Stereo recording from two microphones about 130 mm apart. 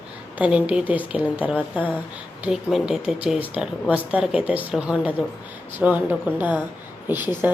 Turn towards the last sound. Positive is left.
turn(degrees=-15)  # may be behind; listen again after turning